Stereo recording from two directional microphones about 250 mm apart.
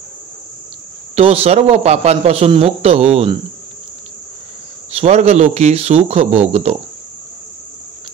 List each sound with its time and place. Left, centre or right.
1.1 s a man's voice: right
4.9 s a man's voice: right